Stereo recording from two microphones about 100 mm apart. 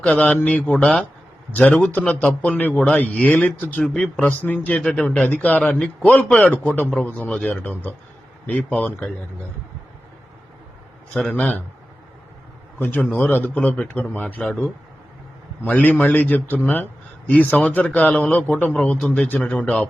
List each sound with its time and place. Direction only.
0.0 s a man's voice: 15° left (ahead or behind)
4.8 s a man's voice: 5° left (ahead or behind)
11.2 s a man's voice: 10° left (ahead or behind)
12.8 s a man's voice: 15° left (ahead or behind)
15.6 s a man's voice: 15° left (ahead or behind)